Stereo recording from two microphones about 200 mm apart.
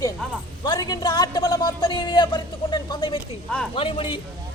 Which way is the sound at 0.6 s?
20° left (ahead or behind).